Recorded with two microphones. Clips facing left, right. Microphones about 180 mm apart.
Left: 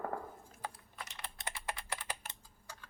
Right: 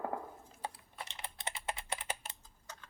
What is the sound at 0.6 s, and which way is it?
Computer keyboard, 30° right (ahead or behind).